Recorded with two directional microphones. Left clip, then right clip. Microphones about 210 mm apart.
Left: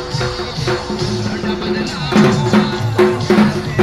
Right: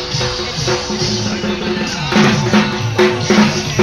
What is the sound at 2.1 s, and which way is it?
Music, 40° left (ahead or behind).